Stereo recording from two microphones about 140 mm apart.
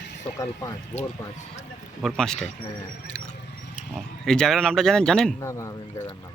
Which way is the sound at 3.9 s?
5° left (ahead or behind).